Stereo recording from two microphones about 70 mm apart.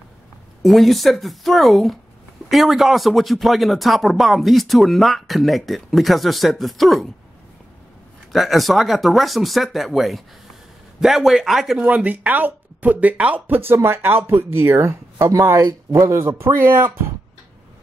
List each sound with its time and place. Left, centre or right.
0.6 s speech: centre
8.3 s speech: centre
11.8 s speech: right
13.6 s speech: right